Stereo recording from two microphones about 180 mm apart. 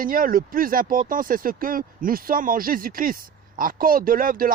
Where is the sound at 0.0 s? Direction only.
50° right (ahead or behind).